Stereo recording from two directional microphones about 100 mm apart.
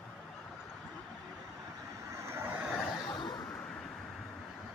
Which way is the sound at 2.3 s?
20° right (ahead or behind).